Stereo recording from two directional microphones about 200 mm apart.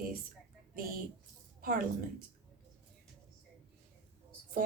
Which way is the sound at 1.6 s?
45° right (ahead or behind).